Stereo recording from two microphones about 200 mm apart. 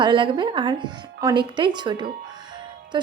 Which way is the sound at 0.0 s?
25° right (ahead or behind).